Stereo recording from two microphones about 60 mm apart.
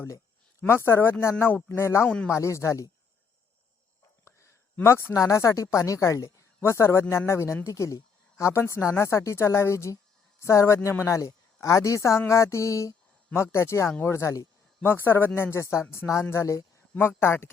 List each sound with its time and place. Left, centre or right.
0.7 s speech: left
2.0 s speech: left
2.3 s speech: left
4.3 s a sound: left
5.1 s speech: left
14.8 s speech: left